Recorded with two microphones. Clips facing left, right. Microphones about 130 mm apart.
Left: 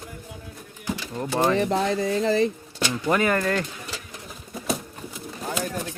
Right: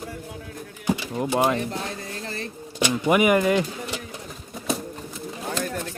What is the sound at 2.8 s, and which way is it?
Speech, 15° right (ahead or behind).